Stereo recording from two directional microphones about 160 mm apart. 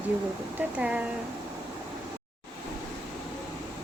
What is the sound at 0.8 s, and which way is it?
Speech, 10° right (ahead or behind).